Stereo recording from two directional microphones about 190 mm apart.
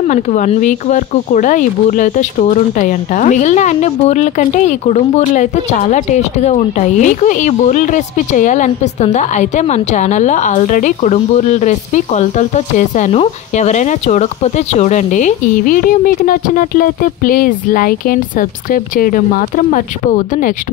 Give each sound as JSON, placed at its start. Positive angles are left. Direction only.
{"t": 0.1, "sound": "speech", "side_deg": 40}